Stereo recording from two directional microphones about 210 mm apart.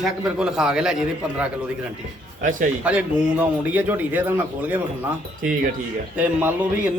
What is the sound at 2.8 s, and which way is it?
A man's voice, 5° right (ahead or behind).